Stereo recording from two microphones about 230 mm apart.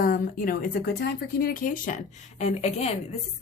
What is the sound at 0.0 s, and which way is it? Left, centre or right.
Speech, left.